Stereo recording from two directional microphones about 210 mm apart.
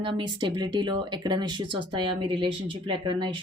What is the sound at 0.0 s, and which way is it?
Speech, 25° right (ahead or behind).